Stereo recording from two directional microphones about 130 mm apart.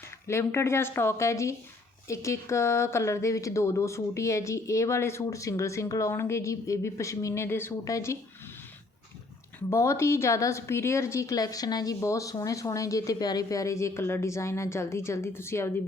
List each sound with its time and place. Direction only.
0.3 s speech: 20° left (ahead or behind)
9.6 s speech: 20° left (ahead or behind)